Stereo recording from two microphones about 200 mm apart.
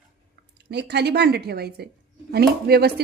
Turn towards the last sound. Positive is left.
turn(degrees=-50)  # may be behind; listen again after turning